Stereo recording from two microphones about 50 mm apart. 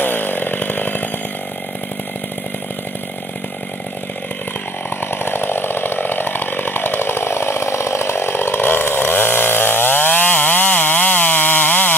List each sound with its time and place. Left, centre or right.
0.0 s chainsaw: left
5.0 s chainsaw: left
7.2 s chainsaw: left